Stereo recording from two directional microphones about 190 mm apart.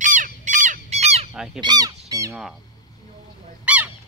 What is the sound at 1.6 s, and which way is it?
Goose, 20° right (ahead or behind).